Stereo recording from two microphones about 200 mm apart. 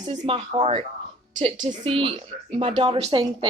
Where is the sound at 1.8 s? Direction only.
25° right (ahead or behind).